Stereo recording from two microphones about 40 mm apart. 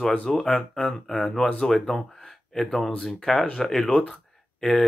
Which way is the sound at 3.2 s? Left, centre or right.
Left.